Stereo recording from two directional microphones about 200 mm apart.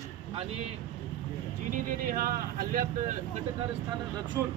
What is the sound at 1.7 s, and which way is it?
Speech, 45° right (ahead or behind).